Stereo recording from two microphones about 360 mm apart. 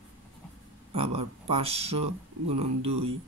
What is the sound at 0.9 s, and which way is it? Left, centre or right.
Speech, centre.